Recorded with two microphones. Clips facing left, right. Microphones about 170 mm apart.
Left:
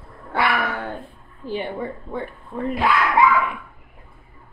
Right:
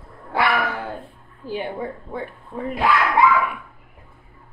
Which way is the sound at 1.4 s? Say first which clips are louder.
Even; 5° right (ahead or behind).